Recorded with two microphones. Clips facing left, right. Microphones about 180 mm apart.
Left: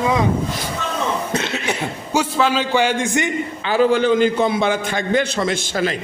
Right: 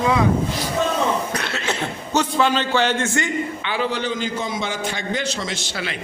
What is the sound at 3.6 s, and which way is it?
A man's voice, 40° left (ahead or behind).